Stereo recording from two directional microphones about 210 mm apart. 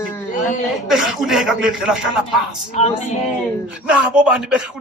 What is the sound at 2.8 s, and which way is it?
Music, 30° left (ahead or behind).